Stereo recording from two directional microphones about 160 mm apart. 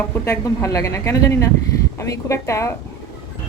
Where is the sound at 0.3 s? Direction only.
20° left (ahead or behind).